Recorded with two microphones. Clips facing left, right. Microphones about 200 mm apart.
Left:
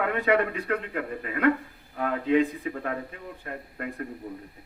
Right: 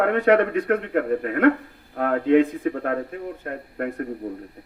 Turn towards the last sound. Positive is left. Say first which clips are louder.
# right 7 dB
turn(degrees=-55)  # may be behind; listen again after turning